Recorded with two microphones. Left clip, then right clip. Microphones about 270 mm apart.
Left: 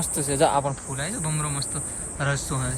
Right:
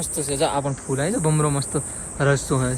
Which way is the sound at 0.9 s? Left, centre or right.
Centre.